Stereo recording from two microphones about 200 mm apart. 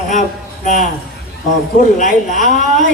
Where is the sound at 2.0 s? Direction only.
40° left (ahead or behind).